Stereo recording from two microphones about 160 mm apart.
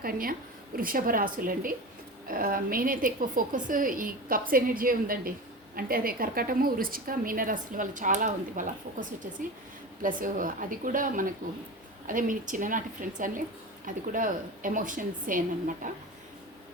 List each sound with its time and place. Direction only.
0.0 s a woman's voice: 65° right (ahead or behind)